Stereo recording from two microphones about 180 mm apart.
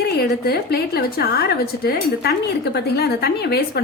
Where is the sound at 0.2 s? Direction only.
60° left (ahead or behind).